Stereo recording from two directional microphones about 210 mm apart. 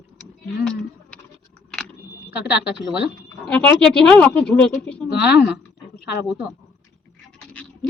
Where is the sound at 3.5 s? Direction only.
5° left (ahead or behind).